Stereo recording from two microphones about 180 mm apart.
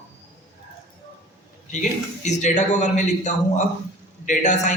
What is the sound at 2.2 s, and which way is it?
A man's voice, 40° left (ahead or behind).